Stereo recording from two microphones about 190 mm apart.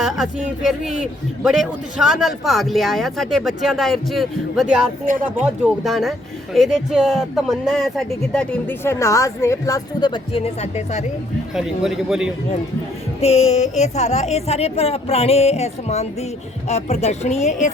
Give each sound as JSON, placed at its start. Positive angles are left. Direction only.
{"t": 0.0, "sound": "speech", "side_deg": -5}
{"t": 11.5, "sound": "speech", "side_deg": 0}
{"t": 13.2, "sound": "speech", "side_deg": 35}